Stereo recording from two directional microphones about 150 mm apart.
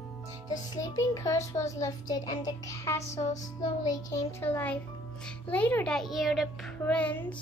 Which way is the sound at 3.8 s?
15° left (ahead or behind).